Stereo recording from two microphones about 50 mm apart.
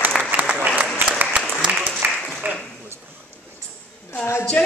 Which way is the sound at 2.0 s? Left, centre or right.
Right.